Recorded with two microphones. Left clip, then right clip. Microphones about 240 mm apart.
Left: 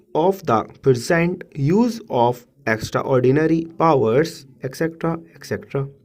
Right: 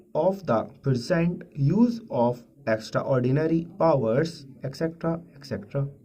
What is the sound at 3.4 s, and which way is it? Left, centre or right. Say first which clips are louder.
Speech: left 5 dB; left.